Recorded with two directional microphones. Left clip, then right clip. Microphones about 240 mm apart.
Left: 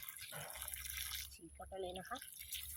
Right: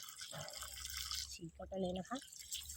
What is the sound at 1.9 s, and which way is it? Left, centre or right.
Speech, right.